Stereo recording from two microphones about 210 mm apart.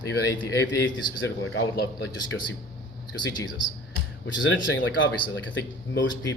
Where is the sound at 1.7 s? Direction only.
55° left (ahead or behind).